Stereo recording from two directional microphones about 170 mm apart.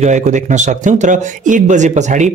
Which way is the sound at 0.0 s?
45° right (ahead or behind).